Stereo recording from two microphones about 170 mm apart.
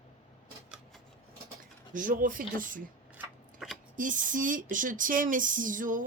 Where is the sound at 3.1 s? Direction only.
Centre (ahead or behind).